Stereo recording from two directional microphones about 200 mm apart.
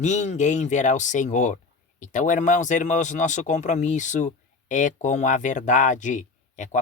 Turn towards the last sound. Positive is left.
turn(degrees=40)  # may be behind; listen again after turning